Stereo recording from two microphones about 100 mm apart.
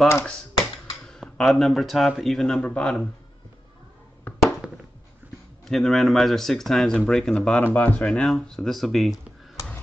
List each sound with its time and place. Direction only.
1.0 s speech: 5° left (ahead or behind)
4.3 s a sound: 20° left (ahead or behind)
4.6 s a sound: 10° right (ahead or behind)
5.7 s speech: centre (ahead or behind)
7.6 s speech: 20° left (ahead or behind)
8.1 s speech: centre (ahead or behind)